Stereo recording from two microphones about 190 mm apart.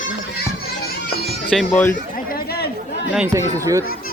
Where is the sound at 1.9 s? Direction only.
50° left (ahead or behind).